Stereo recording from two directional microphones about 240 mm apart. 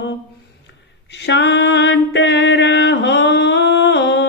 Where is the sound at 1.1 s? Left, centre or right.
Left.